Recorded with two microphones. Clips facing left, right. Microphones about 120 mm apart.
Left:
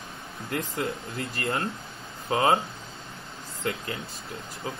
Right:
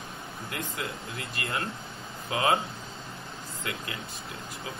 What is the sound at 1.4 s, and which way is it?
Speech, 30° left (ahead or behind).